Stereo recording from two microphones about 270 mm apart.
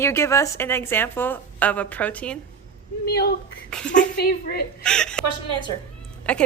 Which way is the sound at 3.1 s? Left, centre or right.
Left.